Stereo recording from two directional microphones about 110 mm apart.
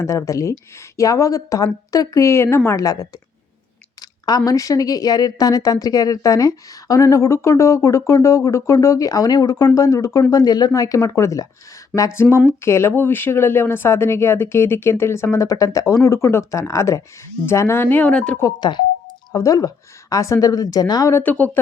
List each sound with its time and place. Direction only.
0.0 s a woman's voice: 30° left (ahead or behind)
4.3 s a woman's voice: 35° left (ahead or behind); by 18.3 s 10° left (ahead or behind)
18.6 s speech: 40° left (ahead or behind)
19.3 s a woman's voice: 30° left (ahead or behind)
21.1 s speech: 20° left (ahead or behind)